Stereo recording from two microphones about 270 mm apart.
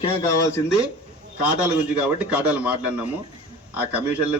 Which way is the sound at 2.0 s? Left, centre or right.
Centre.